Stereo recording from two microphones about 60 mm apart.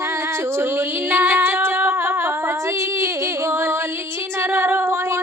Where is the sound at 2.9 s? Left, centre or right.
Right.